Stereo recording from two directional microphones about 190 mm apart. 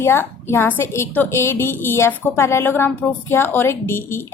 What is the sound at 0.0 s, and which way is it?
A woman's voice, 10° left (ahead or behind).